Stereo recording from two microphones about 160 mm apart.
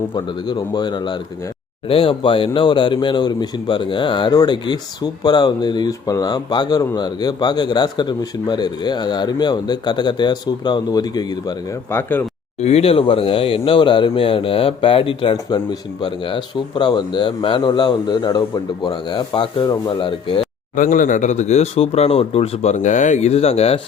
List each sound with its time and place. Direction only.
0.1 s speech: 25° left (ahead or behind)
12.5 s speech: 40° left (ahead or behind)
20.7 s speech: 55° left (ahead or behind); by 23.8 s 40° left (ahead or behind)